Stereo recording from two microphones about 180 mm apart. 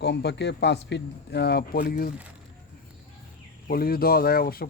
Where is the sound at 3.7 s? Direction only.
55° left (ahead or behind).